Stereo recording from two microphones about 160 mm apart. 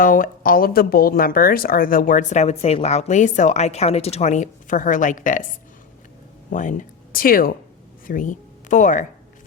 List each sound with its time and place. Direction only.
0.0 s speech: 60° left (ahead or behind)
6.5 s speech: 55° left (ahead or behind)